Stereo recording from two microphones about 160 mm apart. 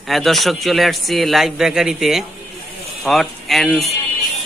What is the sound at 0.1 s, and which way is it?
A man's voice, centre (ahead or behind).